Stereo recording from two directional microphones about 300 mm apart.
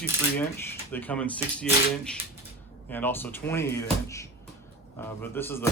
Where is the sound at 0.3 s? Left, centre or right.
Centre.